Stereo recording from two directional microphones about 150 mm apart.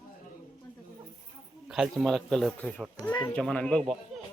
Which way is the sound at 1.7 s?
5° right (ahead or behind).